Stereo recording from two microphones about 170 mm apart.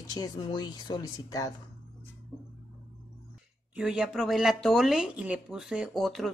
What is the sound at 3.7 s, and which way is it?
Speech, 5° right (ahead or behind).